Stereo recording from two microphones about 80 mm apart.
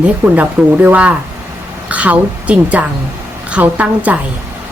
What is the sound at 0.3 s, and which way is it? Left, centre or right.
A woman's voice, centre.